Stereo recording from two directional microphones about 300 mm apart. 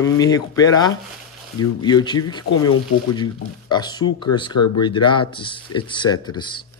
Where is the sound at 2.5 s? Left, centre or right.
Left.